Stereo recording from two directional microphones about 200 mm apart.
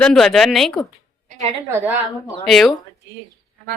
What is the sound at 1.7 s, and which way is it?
Speech, 10° right (ahead or behind).